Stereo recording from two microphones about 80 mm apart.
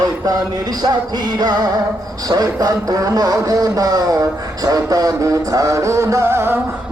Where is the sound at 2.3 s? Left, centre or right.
Right.